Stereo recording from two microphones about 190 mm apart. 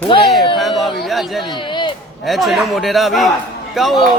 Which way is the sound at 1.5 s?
25° left (ahead or behind).